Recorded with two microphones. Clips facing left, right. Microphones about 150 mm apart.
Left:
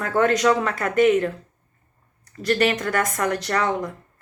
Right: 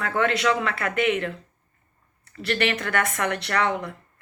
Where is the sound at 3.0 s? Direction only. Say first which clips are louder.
Left 3 dB; 35° left (ahead or behind).